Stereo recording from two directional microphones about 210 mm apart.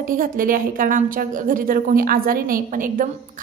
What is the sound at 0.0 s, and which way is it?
A woman's voice, 40° right (ahead or behind).